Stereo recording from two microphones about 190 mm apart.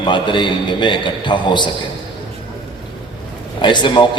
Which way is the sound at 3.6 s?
25° left (ahead or behind).